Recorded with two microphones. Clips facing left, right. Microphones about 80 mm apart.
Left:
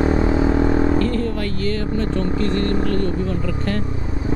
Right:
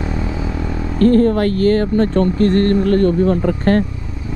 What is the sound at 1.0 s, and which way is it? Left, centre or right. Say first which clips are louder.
Speech: right 9 dB; right.